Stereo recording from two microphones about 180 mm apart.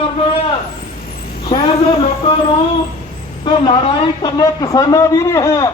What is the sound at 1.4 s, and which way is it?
Speech, 25° left (ahead or behind).